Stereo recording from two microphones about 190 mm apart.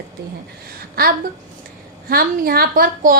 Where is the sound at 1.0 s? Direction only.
55° right (ahead or behind).